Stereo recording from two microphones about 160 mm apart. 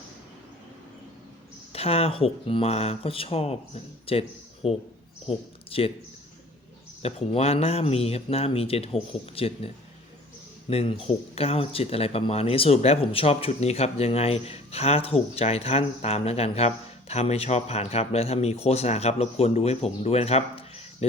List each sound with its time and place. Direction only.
1.7 s speech: 40° left (ahead or behind)
7.0 s speech: 40° left (ahead or behind)